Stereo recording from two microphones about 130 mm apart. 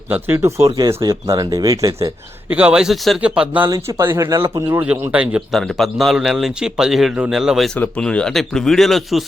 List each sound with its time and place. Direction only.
0.3 s speech: 25° right (ahead or behind)
2.5 s a man's voice: 10° right (ahead or behind)
3.7 s a man's voice: 25° right (ahead or behind); by 7.7 s 5° right (ahead or behind)
7.8 s a man's voice: 10° left (ahead or behind)